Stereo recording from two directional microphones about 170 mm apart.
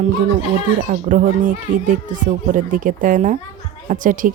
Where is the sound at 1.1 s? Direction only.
50° right (ahead or behind).